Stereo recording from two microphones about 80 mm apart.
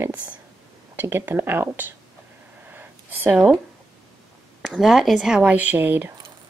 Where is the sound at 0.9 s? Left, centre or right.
Right.